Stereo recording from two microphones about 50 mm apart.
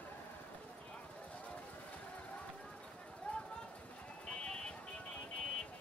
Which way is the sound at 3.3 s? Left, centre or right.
Left.